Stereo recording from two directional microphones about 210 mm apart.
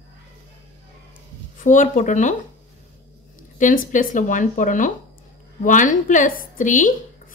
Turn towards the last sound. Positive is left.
turn(degrees=35)  # may be behind; listen again after turning